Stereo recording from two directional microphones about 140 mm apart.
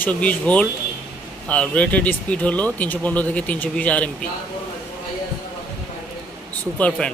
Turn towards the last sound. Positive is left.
turn(degrees=10)  # may be behind; listen again after turning